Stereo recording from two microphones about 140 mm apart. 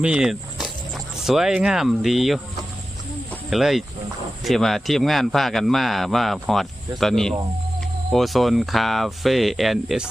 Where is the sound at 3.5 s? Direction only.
Centre (ahead or behind).